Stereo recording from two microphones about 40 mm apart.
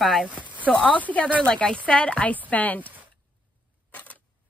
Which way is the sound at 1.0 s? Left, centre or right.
Left.